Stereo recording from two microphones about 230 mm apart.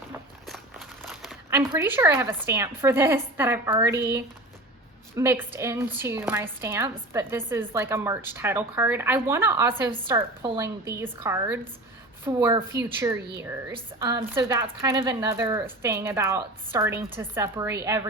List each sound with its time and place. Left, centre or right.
0.4 s a sound: centre
1.5 s a woman's voice: centre
5.1 s a woman's voice: centre